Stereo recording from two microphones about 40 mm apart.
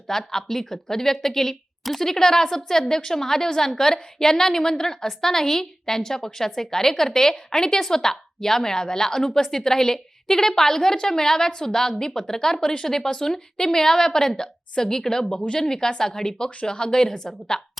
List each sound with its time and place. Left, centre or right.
0.1 s speech: centre